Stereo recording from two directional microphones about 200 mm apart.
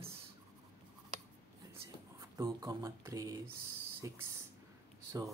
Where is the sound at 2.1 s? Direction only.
15° right (ahead or behind).